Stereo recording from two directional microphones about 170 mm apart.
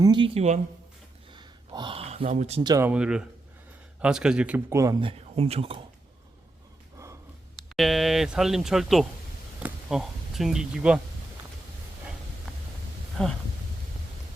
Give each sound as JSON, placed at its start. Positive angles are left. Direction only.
{"t": 0.0, "sound": "speech", "side_deg": -25}
{"t": 0.3, "sound": "speech", "side_deg": -45}
{"t": 1.3, "sound": "gasp", "side_deg": -25}
{"t": 2.3, "sound": "speech", "side_deg": -45}
{"t": 2.6, "sound": "speech", "side_deg": -20}
{"t": 2.9, "sound": "speech", "side_deg": -5}
{"t": 4.9, "sound": "speech", "side_deg": -35}
{"t": 7.8, "sound": "speech", "side_deg": 0}
{"t": 13.2, "sound": "speech", "side_deg": 5}